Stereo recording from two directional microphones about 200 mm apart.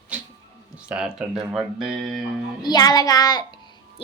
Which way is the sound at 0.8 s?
5° right (ahead or behind).